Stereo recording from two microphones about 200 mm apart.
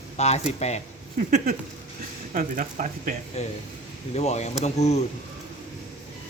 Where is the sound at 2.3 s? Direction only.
40° right (ahead or behind).